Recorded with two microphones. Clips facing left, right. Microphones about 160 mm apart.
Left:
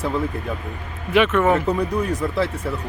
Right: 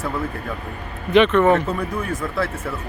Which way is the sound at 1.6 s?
15° left (ahead or behind).